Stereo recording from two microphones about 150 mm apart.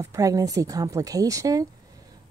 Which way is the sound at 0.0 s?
20° right (ahead or behind).